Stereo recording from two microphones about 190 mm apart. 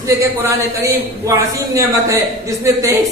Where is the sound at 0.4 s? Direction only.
10° right (ahead or behind).